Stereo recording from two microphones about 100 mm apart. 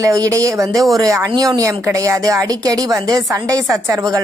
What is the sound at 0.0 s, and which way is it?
A woman's voice, 35° right (ahead or behind).